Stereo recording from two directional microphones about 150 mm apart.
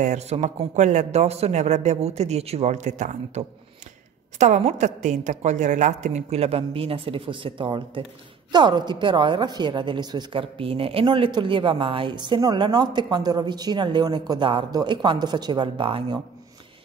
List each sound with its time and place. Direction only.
0.0 s a woman's voice: 50° right (ahead or behind); by 16.2 s 35° right (ahead or behind)